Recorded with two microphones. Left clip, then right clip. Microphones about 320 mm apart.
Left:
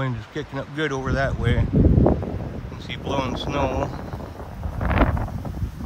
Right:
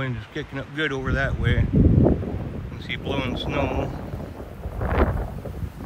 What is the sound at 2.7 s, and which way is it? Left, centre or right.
Speech, centre.